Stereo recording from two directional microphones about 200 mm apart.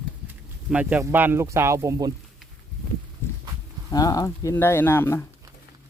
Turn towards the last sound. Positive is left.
turn(degrees=15)  # may be behind; listen again after turning